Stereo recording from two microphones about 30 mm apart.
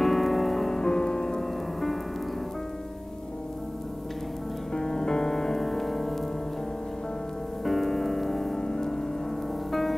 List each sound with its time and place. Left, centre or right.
0.0 s music: centre
0.7 s music: centre
1.4 s music: centre
4.7 s music: left
5.3 s music: centre
7.6 s music: centre
8.5 s music: centre
9.7 s music: centre